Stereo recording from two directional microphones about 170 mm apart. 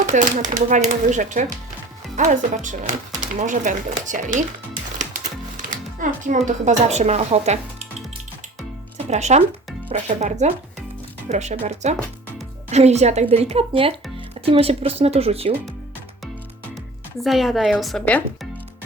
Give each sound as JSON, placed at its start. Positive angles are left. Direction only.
{"t": 0.0, "sound": "speech", "side_deg": -45}
{"t": 4.9, "sound": "music", "side_deg": -45}
{"t": 5.7, "sound": "speech", "side_deg": -50}
{"t": 9.0, "sound": "a woman's voice", "side_deg": -40}
{"t": 17.2, "sound": "a woman's voice", "side_deg": 0}